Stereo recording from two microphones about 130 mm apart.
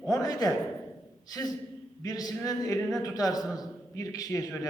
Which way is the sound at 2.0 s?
30° left (ahead or behind).